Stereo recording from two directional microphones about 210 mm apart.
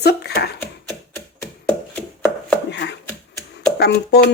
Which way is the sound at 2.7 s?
55° left (ahead or behind).